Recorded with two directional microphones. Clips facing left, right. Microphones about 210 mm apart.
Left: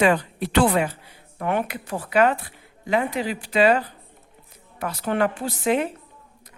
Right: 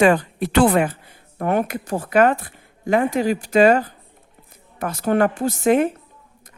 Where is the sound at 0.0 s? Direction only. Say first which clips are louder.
Right 4 dB; 45° right (ahead or behind).